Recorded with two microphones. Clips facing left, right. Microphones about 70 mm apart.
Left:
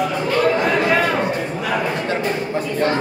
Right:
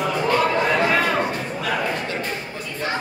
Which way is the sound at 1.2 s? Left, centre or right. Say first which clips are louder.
Left 3 dB; centre.